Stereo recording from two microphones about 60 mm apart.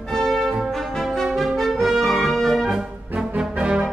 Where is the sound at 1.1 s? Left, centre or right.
Centre.